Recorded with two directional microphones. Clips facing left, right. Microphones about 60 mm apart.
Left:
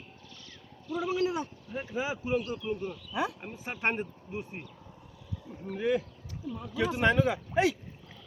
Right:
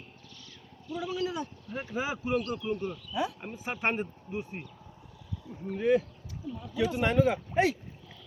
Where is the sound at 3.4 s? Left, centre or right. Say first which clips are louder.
Right 1 dB; centre.